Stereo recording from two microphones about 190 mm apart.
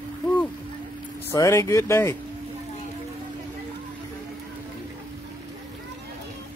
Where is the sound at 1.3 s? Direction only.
15° left (ahead or behind).